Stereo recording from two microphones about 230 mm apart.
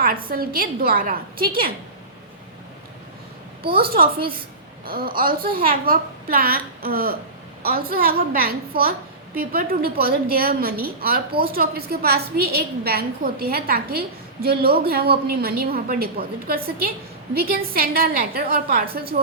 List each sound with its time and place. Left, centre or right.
0.0 s a woman's voice: right
3.8 s a woman's voice: right